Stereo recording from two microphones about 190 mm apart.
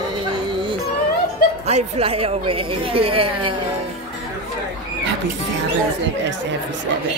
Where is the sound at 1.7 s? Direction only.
35° right (ahead or behind).